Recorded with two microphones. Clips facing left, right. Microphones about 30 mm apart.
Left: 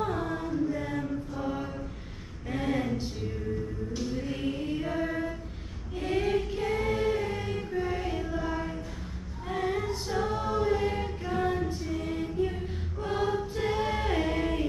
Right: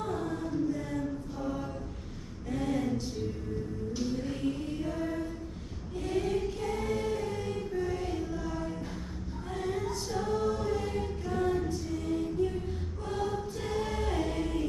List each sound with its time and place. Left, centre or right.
0.0 s chant: left
2.5 s a sound: left
5.9 s choir: left